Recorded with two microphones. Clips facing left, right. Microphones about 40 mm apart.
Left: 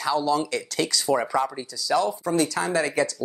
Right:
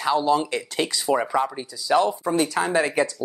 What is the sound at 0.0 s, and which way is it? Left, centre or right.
Speech, right.